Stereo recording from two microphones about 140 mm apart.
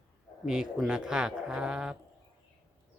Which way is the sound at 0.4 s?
5° right (ahead or behind).